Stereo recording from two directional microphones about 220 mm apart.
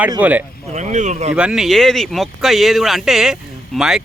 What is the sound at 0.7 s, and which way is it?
Speech, 30° right (ahead or behind).